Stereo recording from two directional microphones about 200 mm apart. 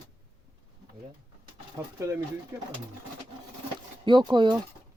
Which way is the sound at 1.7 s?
15° right (ahead or behind).